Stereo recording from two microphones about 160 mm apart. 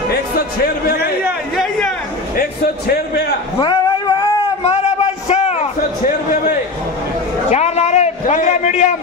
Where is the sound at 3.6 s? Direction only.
30° left (ahead or behind).